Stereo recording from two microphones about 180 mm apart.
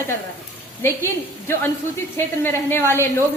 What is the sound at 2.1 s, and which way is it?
A woman's voice, 10° left (ahead or behind).